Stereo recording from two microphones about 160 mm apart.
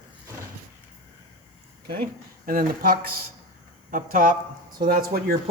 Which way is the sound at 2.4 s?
60° right (ahead or behind).